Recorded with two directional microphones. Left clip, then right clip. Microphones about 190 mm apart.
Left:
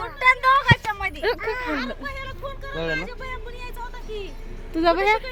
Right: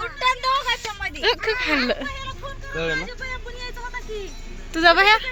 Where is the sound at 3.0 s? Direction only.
35° left (ahead or behind).